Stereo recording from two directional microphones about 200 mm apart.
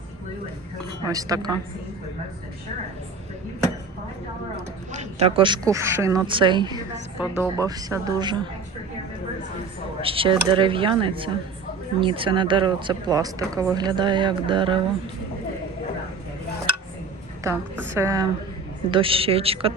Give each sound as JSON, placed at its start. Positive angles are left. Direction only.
{"t": 1.0, "sound": "a woman's voice", "side_deg": -15}
{"t": 4.9, "sound": "a woman's voice", "side_deg": -35}
{"t": 7.2, "sound": "speech", "side_deg": 15}
{"t": 7.6, "sound": "a woman's voice", "side_deg": -20}
{"t": 10.0, "sound": "a woman's voice", "side_deg": -25}
{"t": 17.9, "sound": "a woman's voice", "side_deg": -15}
{"t": 18.9, "sound": "a woman's voice", "side_deg": -25}